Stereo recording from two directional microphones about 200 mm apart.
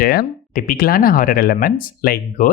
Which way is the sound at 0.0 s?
50° left (ahead or behind).